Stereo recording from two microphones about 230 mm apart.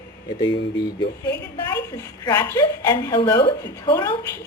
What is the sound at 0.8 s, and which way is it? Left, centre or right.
A woman's voice, centre.